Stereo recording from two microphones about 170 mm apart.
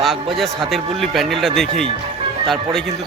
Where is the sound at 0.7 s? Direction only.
Centre (ahead or behind).